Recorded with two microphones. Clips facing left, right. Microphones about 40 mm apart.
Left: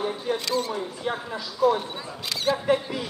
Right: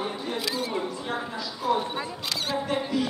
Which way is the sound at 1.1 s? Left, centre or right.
Centre.